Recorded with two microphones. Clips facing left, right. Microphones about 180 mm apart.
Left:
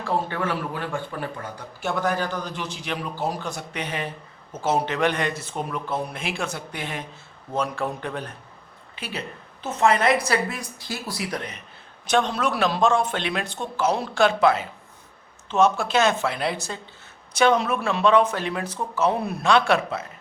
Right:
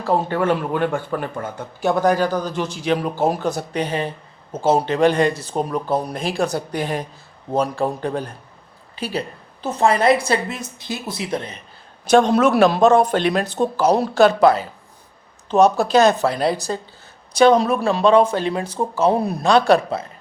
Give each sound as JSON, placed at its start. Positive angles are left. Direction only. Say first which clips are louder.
{"t": 0.0, "sound": "a man's voice", "louder": "right 6 dB", "side_deg": -40}
{"t": 0.9, "sound": "a man's voice", "louder": "right 6 dB", "side_deg": -45}
{"t": 12.0, "sound": "speech", "louder": "right 8 dB", "side_deg": -40}